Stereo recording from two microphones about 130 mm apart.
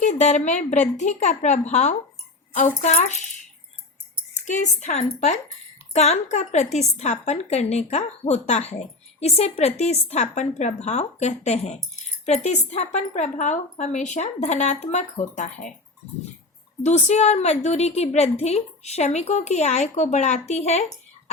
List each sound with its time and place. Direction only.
0.0 s a woman's voice: 60° left (ahead or behind)
4.4 s a woman's voice: 70° left (ahead or behind)
16.8 s a woman's voice: 60° left (ahead or behind)